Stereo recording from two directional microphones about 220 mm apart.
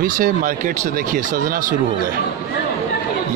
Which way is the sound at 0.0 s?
40° right (ahead or behind).